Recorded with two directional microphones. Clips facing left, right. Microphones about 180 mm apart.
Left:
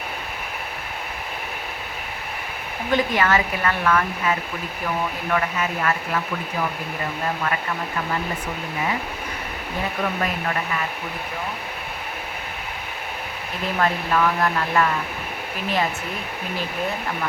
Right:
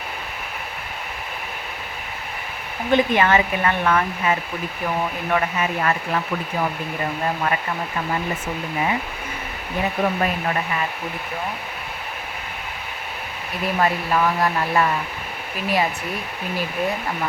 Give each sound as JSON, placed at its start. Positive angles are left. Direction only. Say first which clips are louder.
{"t": 2.9, "sound": "speech", "louder": "right 3 dB", "side_deg": -20}
{"t": 10.0, "sound": "speech", "louder": "right 4 dB", "side_deg": -20}
{"t": 13.7, "sound": "speech", "louder": "right 1 dB", "side_deg": -15}